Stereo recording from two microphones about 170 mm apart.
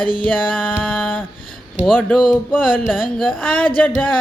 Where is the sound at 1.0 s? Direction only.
Centre (ahead or behind).